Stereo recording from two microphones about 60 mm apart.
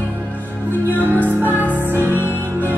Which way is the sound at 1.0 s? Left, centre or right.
Right.